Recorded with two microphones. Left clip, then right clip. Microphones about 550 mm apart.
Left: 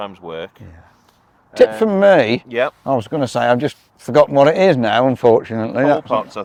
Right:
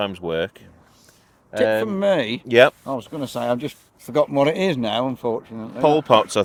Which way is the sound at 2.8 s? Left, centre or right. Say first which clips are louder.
Left 9 dB; left.